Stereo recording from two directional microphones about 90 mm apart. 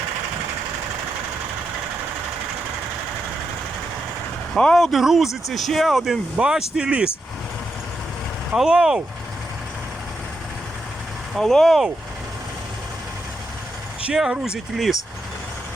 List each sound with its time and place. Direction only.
4.5 s speech: 5° left (ahead or behind); by 7.1 s 10° right (ahead or behind)
8.5 s speech: 5° right (ahead or behind)
11.3 s speech: centre (ahead or behind)
14.0 s speech: 5° right (ahead or behind)